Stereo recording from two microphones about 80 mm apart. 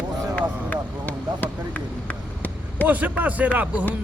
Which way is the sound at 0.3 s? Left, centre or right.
Left.